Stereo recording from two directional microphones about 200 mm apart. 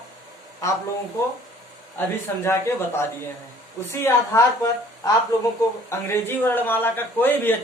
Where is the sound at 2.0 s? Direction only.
10° left (ahead or behind).